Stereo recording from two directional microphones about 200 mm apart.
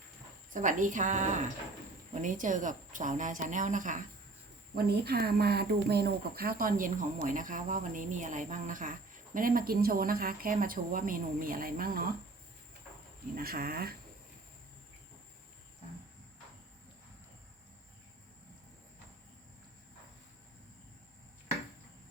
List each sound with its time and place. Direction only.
0.5 s a woman's voice: 40° right (ahead or behind)
4.7 s speech: 50° right (ahead or behind)
13.3 s speech: 50° right (ahead or behind)